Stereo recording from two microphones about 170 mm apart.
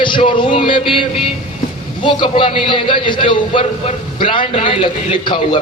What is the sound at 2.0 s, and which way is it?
A man's voice, 30° left (ahead or behind).